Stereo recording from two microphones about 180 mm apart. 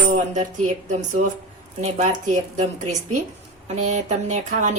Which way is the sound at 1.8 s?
40° right (ahead or behind).